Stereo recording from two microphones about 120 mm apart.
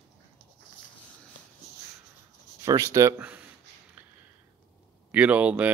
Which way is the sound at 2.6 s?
30° right (ahead or behind).